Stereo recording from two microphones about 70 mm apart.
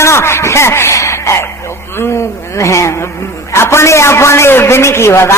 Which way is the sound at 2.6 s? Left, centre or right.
Left.